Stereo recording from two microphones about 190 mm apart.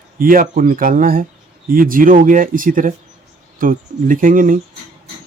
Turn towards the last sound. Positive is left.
turn(degrees=-45)  # may be behind; listen again after turning